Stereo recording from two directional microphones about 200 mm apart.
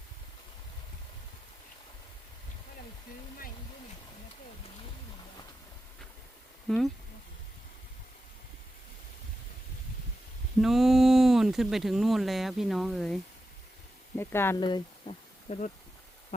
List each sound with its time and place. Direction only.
6.7 s speech: centre (ahead or behind)
10.6 s speech: centre (ahead or behind)
14.2 s speech: 10° left (ahead or behind)
14.6 s a sound: 25° left (ahead or behind)